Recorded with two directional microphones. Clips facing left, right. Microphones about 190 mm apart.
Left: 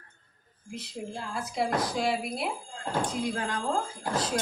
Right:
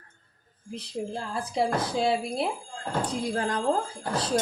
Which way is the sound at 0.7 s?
30° right (ahead or behind).